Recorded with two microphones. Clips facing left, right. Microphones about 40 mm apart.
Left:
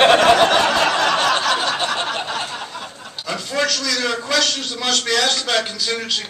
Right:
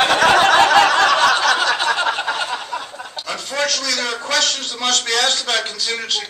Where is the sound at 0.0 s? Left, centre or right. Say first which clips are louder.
Left 2 dB; left.